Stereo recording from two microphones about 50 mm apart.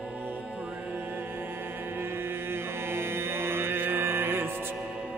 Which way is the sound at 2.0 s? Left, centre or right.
Right.